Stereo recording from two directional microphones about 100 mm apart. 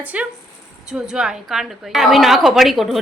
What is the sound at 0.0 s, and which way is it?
A woman's voice, 15° right (ahead or behind).